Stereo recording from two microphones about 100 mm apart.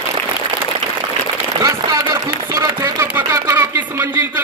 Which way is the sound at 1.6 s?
35° right (ahead or behind).